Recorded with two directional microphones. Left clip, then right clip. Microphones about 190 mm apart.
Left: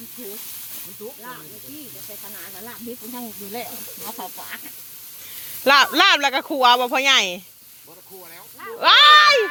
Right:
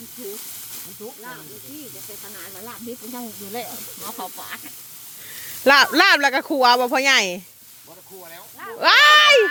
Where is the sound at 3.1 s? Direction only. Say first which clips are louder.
Right 1 dB; 25° left (ahead or behind).